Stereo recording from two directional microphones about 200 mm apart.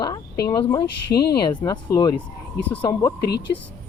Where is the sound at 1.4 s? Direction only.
20° left (ahead or behind).